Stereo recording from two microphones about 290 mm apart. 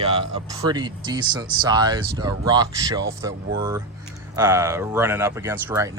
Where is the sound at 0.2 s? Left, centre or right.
Centre.